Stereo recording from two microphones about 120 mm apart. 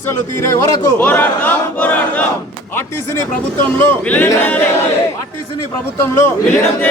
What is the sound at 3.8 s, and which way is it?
Speech, 15° left (ahead or behind).